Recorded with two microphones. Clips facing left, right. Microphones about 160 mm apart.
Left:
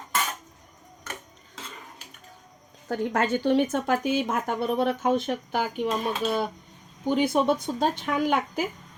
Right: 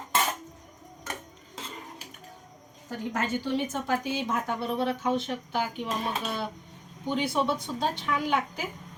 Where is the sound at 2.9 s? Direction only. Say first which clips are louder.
Left 5 dB; 70° left (ahead or behind); by 5.9 s 50° left (ahead or behind).